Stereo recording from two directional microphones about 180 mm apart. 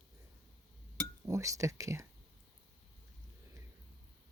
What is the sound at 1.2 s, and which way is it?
Speech, 15° right (ahead or behind).